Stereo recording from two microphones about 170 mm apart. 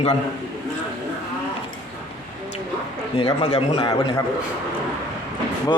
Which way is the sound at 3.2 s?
25° left (ahead or behind).